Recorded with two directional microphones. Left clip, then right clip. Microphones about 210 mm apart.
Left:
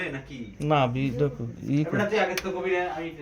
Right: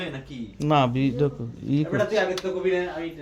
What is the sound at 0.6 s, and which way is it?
Speech, 20° right (ahead or behind).